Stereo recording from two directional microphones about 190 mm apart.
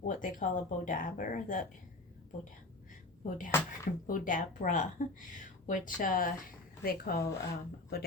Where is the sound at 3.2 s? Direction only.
45° left (ahead or behind).